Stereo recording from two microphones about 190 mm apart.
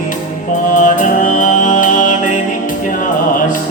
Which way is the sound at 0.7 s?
45° left (ahead or behind).